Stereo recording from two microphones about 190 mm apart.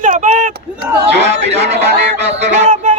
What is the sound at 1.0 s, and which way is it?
A man's voice, 65° right (ahead or behind).